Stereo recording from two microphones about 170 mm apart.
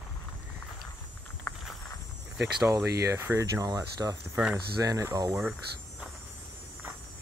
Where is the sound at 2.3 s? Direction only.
5° right (ahead or behind).